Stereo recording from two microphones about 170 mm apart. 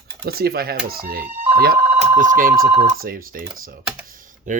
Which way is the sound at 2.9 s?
55° right (ahead or behind).